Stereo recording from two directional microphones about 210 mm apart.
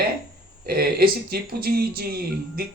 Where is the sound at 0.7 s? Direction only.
45° right (ahead or behind).